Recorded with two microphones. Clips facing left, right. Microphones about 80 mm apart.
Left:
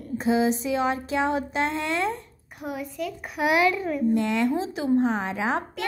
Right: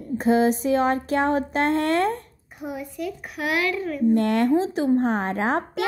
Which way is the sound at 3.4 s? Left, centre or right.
Centre.